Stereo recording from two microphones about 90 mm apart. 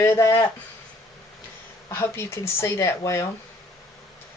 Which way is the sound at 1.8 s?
30° left (ahead or behind).